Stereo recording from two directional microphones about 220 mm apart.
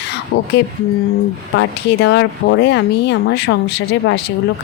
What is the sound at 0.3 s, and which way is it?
Speech, 50° left (ahead or behind).